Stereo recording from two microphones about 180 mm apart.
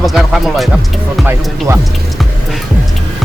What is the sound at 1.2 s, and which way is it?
Speech, 15° right (ahead or behind).